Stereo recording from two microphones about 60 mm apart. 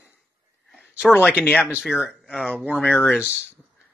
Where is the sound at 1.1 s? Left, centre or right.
Left.